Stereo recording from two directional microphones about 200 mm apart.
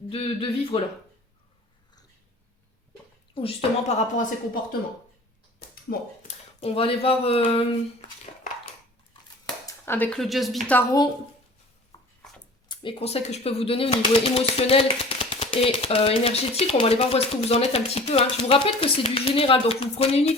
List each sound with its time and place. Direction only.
0.1 s speech: 30° left (ahead or behind)
3.3 s a woman's voice: 30° left (ahead or behind)
5.9 s speech: 45° left (ahead or behind)
6.2 s speech: 30° left (ahead or behind)
9.6 s speech: 10° left (ahead or behind)
11.9 s a sound: 20° left (ahead or behind)
12.6 s speech: 25° left (ahead or behind)